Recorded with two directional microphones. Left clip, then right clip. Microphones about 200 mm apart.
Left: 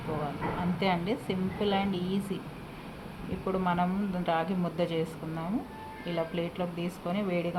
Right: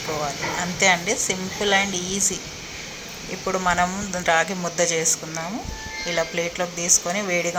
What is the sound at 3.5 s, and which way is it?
Speech, 10° right (ahead or behind).